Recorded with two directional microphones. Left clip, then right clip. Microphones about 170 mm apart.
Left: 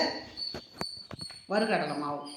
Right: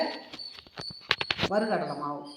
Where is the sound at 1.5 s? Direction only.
25° right (ahead or behind).